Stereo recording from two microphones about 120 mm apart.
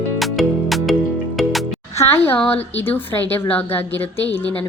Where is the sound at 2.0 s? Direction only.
20° left (ahead or behind).